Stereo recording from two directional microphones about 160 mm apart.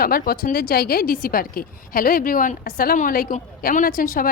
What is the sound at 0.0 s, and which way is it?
A woman's voice, 65° left (ahead or behind).